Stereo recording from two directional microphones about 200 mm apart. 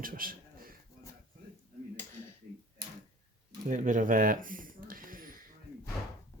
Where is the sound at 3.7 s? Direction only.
40° right (ahead or behind).